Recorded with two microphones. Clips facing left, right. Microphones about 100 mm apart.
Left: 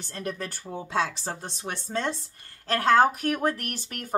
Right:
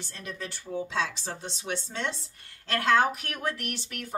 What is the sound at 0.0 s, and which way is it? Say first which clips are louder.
A woman's voice: left 5 dB; 50° left (ahead or behind).